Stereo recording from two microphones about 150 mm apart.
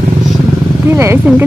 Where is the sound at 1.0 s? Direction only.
15° right (ahead or behind).